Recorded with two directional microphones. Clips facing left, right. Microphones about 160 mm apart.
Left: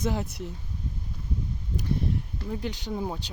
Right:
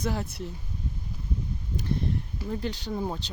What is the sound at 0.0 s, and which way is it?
Speech, 20° left (ahead or behind).